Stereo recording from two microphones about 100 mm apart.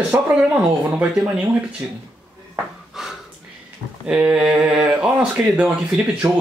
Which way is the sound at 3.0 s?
5° right (ahead or behind).